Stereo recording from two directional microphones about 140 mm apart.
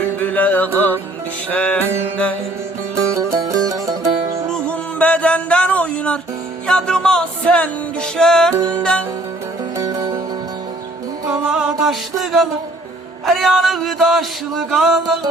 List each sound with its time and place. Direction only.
0.2 s music: 10° left (ahead or behind)
2.9 s music: 20° right (ahead or behind)
4.5 s music: 10° left (ahead or behind)
8.5 s music: 15° right (ahead or behind)
8.8 s music: 5° left (ahead or behind)
9.7 s music: 25° right (ahead or behind)
11.3 s music: 5° right (ahead or behind)